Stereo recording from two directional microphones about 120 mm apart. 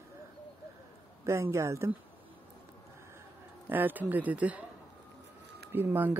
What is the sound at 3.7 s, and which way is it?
Speech, 15° right (ahead or behind).